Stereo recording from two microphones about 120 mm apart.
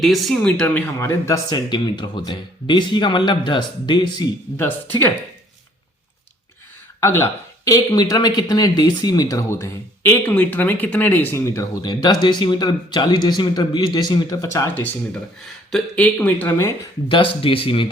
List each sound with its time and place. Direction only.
0.0 s speech: centre (ahead or behind)
0.6 s speech: 10° left (ahead or behind)
0.9 s speech: 25° left (ahead or behind)
1.5 s speech: 35° left (ahead or behind)
4.5 s speech: 15° left (ahead or behind)
7.0 s speech: 20° left (ahead or behind)
11.8 s speech: 35° left (ahead or behind)
15.7 s speech: 10° left (ahead or behind)
17.1 s speech: 45° left (ahead or behind)